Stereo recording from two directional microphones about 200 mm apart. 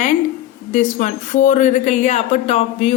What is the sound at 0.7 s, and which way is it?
Speech, 40° left (ahead or behind).